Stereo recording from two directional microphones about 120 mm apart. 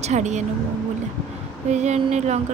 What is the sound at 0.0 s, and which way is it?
Speech, 75° right (ahead or behind).